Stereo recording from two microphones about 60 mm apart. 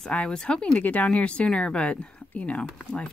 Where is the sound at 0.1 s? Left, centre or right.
Centre.